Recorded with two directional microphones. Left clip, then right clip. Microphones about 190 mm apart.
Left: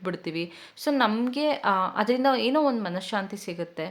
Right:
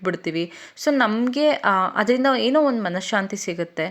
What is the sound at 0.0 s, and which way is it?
Speech, 25° right (ahead or behind).